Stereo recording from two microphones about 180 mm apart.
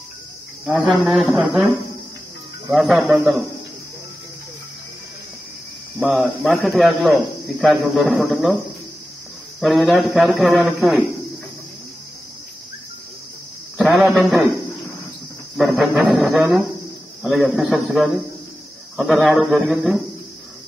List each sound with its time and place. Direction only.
0.7 s a man's voice: 5° left (ahead or behind)
5.9 s hum: 10° right (ahead or behind)
6.4 s a man's voice: centre (ahead or behind)
7.8 s a man's voice: 5° right (ahead or behind)
9.6 s a man's voice: centre (ahead or behind)
13.8 s a man's voice: centre (ahead or behind)
15.5 s a man's voice: 5° right (ahead or behind)